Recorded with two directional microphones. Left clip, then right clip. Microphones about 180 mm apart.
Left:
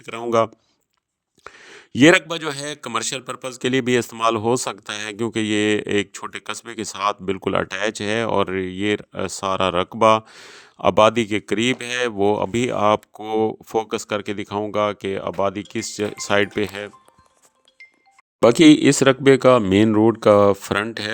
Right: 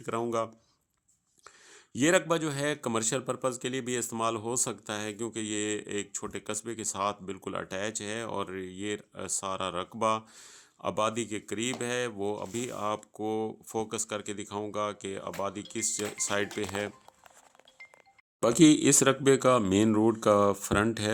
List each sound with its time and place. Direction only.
0.0 s a man's voice: 50° left (ahead or behind)
18.3 s a man's voice: 50° left (ahead or behind)